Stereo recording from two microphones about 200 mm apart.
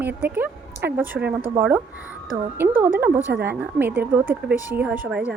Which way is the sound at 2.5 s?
10° right (ahead or behind).